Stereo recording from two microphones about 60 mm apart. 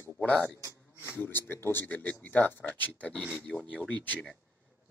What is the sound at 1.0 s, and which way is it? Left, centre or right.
A man's voice, left.